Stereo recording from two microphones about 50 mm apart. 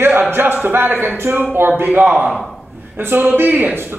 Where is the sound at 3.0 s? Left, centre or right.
Right.